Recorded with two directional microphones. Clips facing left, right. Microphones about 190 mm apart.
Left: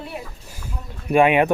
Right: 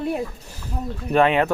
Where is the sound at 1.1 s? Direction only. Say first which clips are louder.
Left 2 dB; 15° left (ahead or behind).